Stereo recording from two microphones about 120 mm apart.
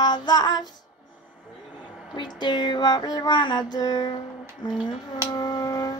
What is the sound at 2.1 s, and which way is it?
Female singing, 40° left (ahead or behind).